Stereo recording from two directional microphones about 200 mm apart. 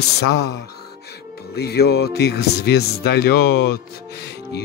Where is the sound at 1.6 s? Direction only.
55° left (ahead or behind).